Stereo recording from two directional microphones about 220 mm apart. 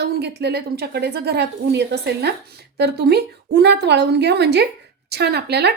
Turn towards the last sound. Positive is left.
turn(degrees=-50)  # may be behind; listen again after turning